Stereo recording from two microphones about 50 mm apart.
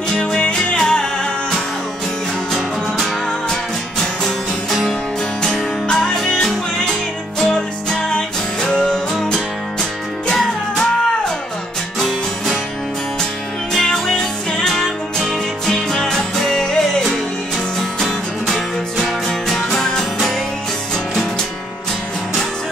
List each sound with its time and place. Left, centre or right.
0.1 s music: centre
2.5 s music: centre
13.7 s music: centre
18.0 s music: centre